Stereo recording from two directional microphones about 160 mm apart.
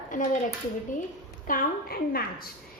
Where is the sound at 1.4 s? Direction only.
65° left (ahead or behind).